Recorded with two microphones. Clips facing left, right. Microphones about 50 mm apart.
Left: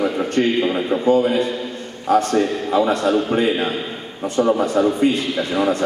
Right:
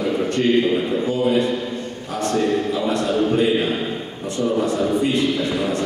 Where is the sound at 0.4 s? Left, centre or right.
Left.